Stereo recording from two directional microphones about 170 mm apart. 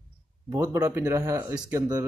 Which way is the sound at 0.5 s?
20° right (ahead or behind).